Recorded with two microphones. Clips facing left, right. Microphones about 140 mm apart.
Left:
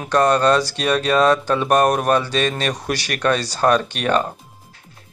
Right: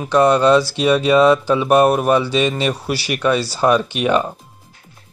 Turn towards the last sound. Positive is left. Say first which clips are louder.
# right 2 dB
turn(degrees=-10)  # may be behind; listen again after turning